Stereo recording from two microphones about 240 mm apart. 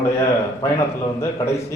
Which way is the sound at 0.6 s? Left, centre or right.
Centre.